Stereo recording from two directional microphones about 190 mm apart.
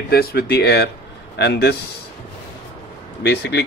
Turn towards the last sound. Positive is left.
turn(degrees=65)  # may be behind; listen again after turning